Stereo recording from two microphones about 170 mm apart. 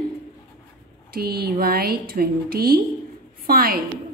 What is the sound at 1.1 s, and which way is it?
A woman's voice, 65° right (ahead or behind).